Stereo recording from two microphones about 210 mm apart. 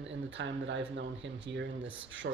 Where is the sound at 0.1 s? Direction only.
60° right (ahead or behind).